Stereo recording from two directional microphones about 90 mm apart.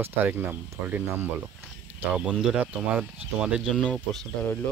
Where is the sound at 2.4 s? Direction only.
5° right (ahead or behind).